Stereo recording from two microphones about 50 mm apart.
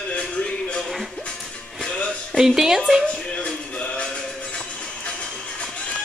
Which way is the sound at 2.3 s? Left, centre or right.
Centre.